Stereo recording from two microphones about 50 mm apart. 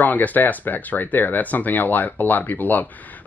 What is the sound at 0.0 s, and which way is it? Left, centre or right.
Speech, left.